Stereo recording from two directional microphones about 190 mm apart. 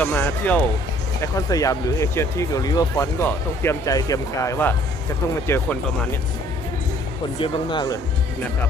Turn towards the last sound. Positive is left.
turn(degrees=25)  # may be behind; listen again after turning